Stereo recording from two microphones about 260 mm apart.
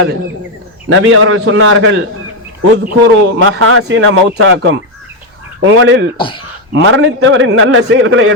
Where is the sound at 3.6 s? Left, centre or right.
Right.